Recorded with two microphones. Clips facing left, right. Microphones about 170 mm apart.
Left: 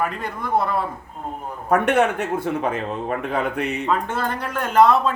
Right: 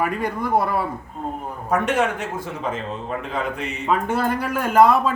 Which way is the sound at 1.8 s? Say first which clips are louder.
Left 3 dB; 60° left (ahead or behind).